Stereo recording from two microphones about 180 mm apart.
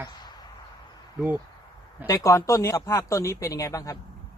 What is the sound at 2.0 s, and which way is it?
Speech, 20° left (ahead or behind).